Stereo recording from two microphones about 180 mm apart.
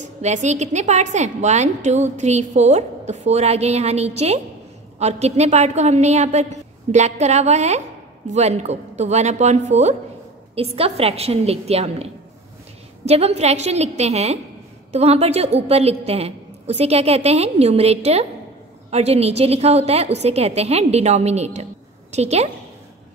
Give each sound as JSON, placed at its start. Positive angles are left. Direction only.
{"t": 0.0, "sound": "a woman's voice", "side_deg": -40}